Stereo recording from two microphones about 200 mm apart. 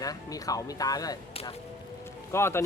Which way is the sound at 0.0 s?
15° left (ahead or behind).